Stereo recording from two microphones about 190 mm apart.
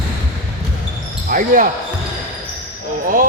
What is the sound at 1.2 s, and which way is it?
Speech, 45° right (ahead or behind).